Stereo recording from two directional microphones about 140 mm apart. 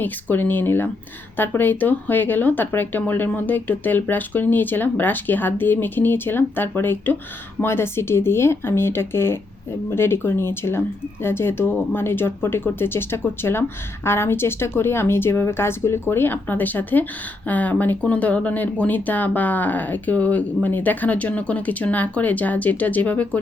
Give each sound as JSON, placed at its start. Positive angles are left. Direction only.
{"t": 0.0, "sound": "speech", "side_deg": 15}